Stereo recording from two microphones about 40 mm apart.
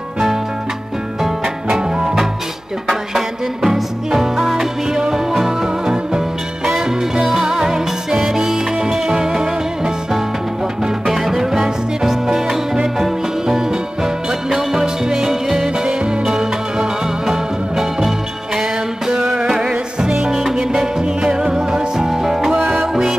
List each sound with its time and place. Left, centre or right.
1.2 s music: centre
11.1 s music: centre
22.6 s music: centre